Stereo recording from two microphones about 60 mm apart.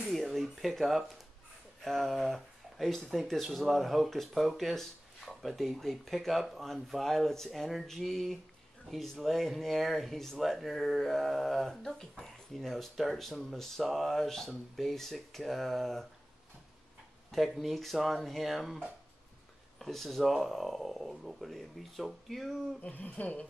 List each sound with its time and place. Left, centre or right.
0.1 s speech: centre
17.3 s speech: centre
19.8 s speech: centre
22.8 s speech: left